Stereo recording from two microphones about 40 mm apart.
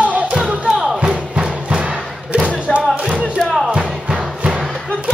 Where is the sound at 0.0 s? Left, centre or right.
Right.